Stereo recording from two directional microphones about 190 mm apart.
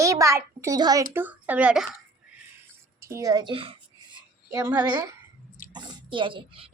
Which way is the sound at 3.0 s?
15° right (ahead or behind).